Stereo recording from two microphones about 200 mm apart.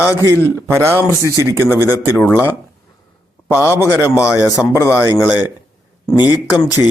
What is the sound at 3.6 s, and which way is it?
Speech, 10° right (ahead or behind).